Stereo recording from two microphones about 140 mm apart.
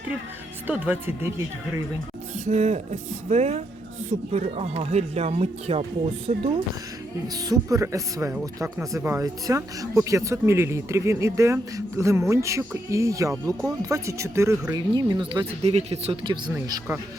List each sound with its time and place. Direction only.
0.7 s speech: 15° right (ahead or behind)
2.4 s speech: 55° right (ahead or behind)
7.4 s speech: 25° right (ahead or behind)
15.7 s speech: 45° right (ahead or behind)
16.5 s speech: 25° right (ahead or behind)